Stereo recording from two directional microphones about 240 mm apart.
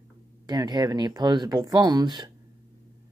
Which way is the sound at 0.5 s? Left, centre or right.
Centre.